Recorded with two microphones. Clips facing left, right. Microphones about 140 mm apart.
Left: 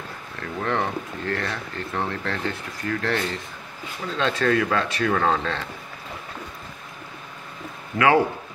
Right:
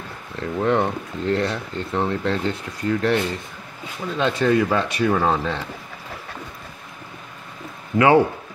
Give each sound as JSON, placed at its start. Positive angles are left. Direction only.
{"t": 0.4, "sound": "speech", "side_deg": -20}
{"t": 7.9, "sound": "speech", "side_deg": -20}